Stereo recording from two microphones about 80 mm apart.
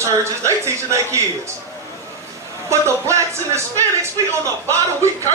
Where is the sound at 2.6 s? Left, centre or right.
Right.